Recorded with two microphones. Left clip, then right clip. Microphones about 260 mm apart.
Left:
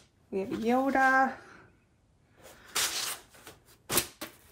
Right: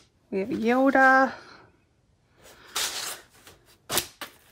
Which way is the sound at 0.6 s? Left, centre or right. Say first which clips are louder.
Right 6 dB; centre.